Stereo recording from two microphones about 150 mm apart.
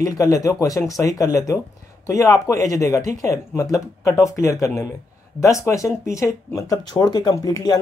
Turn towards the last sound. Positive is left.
turn(degrees=20)  # may be behind; listen again after turning